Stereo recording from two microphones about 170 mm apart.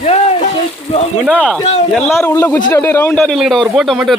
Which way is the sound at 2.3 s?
15° left (ahead or behind).